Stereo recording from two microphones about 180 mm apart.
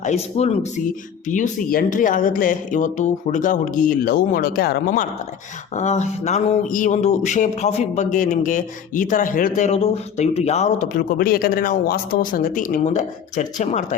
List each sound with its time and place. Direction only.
0.0 s speech: 40° left (ahead or behind); by 5.0 s 55° left (ahead or behind)
5.7 s speech: 40° left (ahead or behind)